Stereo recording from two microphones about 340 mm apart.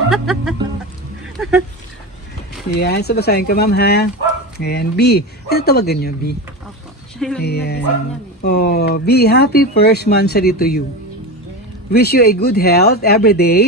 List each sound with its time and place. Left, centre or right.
0.1 s music: centre
1.3 s a sound: centre
2.7 s speech: left
7.2 s speech: centre
7.4 s speech: left
11.9 s speech: left